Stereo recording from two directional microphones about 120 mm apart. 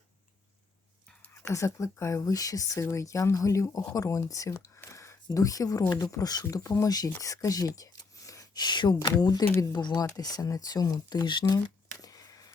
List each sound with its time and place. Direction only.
1.3 s speech: 25° left (ahead or behind)
9.4 s speech: 20° left (ahead or behind)
9.7 s speech: 35° left (ahead or behind)
12.0 s a sound: 30° left (ahead or behind)